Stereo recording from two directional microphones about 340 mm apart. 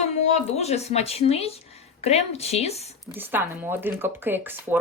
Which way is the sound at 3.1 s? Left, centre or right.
Centre.